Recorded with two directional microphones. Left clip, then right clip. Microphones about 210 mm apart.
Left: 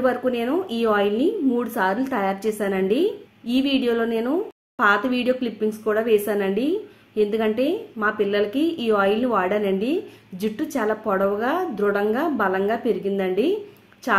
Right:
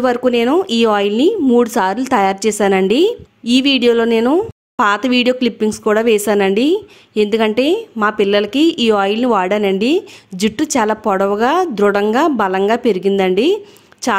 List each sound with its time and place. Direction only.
0.0 s a woman's voice: 50° right (ahead or behind)